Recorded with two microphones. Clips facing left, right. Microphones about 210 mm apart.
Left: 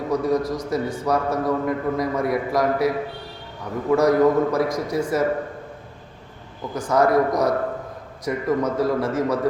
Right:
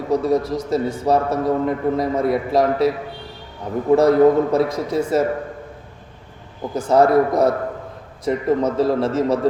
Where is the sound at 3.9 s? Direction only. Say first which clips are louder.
Right 4 dB; 25° right (ahead or behind).